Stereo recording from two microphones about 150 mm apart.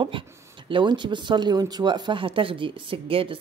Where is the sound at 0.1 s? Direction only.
35° right (ahead or behind).